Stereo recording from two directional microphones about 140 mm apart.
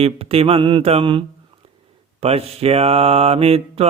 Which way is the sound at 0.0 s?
45° right (ahead or behind).